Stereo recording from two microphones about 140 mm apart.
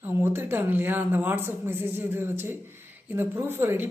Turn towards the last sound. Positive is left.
turn(degrees=-15)  # may be behind; listen again after turning